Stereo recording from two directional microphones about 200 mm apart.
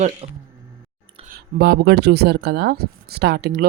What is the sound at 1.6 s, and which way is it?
Speech, 55° right (ahead or behind).